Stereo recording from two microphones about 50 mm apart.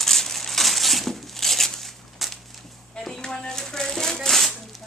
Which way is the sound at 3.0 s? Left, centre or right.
Centre.